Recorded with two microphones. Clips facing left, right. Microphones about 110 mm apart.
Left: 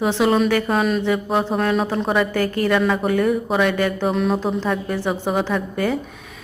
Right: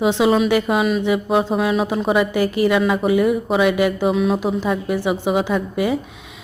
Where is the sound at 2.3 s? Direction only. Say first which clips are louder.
Right 2 dB; 15° right (ahead or behind).